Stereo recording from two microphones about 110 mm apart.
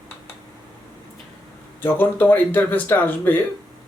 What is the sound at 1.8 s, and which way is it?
Speech, 20° left (ahead or behind).